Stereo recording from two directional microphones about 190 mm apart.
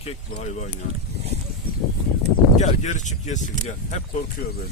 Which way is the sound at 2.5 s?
40° left (ahead or behind).